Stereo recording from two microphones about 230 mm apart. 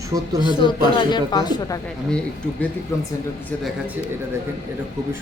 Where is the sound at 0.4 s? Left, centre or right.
Centre.